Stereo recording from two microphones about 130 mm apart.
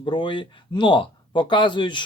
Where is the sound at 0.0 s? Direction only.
40° left (ahead or behind).